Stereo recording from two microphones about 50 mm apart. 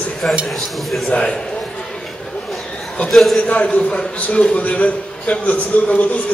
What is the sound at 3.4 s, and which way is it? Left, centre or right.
A man's voice, left.